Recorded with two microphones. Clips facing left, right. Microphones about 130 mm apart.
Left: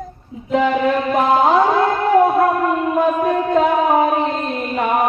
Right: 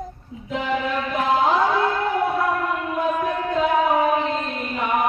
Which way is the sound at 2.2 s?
40° left (ahead or behind).